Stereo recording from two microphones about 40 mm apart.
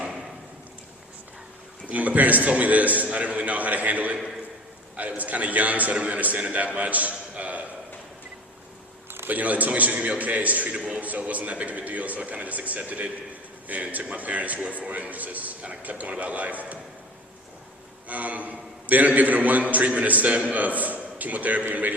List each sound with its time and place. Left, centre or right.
1.9 s a man's voice: right
9.3 s a man's voice: right
10.7 s a man's voice: right
11.0 s a man's voice: right
18.1 s a man's voice: right